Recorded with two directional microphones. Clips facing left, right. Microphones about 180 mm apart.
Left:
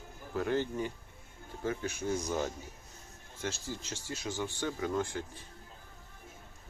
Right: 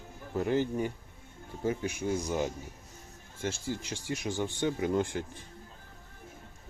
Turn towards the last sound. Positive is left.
turn(degrees=-20)  # may be behind; listen again after turning